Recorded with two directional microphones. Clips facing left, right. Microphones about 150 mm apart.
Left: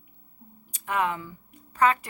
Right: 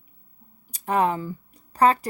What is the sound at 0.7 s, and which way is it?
Speech, 35° right (ahead or behind).